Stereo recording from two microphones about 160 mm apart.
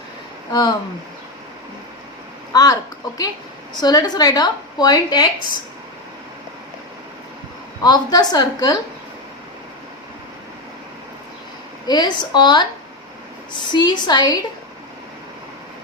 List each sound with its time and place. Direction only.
0.5 s a woman's voice: 25° left (ahead or behind)
2.5 s speech: 25° left (ahead or behind)
3.8 s a woman's voice: 25° left (ahead or behind)
7.8 s a woman's voice: 25° left (ahead or behind)
11.9 s a woman's voice: 25° left (ahead or behind)
13.7 s a woman's voice: 30° left (ahead or behind)